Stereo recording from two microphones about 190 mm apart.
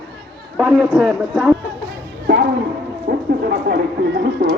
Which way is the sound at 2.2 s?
55° right (ahead or behind).